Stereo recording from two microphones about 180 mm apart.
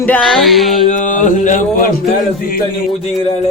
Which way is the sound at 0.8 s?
45° left (ahead or behind).